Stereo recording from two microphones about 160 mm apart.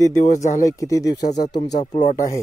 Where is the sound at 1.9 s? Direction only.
50° left (ahead or behind).